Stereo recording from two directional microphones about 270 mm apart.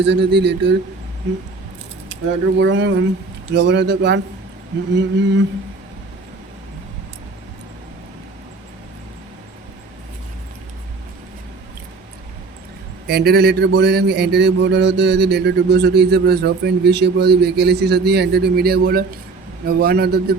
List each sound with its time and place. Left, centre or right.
0.0 s a man's voice: right
2.6 s a man's voice: right
13.1 s a man's voice: right